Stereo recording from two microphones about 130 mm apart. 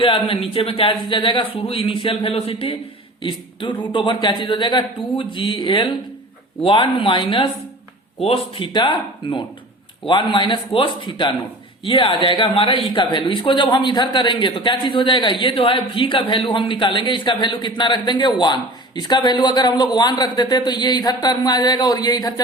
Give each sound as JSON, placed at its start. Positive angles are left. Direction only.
{"t": 0.0, "sound": "speech", "side_deg": 45}